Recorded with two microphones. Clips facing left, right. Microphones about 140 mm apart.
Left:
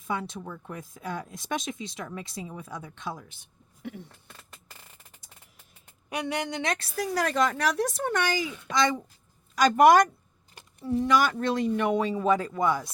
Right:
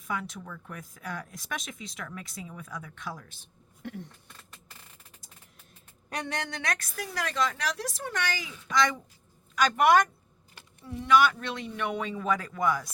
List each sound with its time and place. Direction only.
0.1 s speech: 25° left (ahead or behind)
3.8 s a sound: 5° left (ahead or behind)
6.1 s speech: 10° left (ahead or behind); by 8.1 s 55° left (ahead or behind)
8.7 s speech: 25° left (ahead or behind)
9.6 s speech: 40° left (ahead or behind)